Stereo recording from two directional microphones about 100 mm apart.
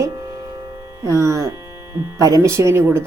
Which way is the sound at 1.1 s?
30° right (ahead or behind).